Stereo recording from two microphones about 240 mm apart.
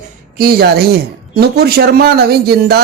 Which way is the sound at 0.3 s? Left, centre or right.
Right.